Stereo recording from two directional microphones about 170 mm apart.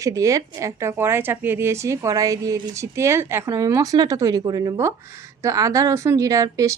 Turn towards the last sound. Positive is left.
turn(degrees=-20)  # may be behind; listen again after turning